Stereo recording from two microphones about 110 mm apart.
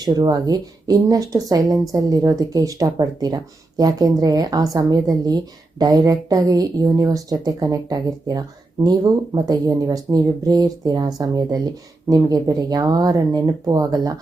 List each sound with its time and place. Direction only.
0.0 s speech: 40° right (ahead or behind)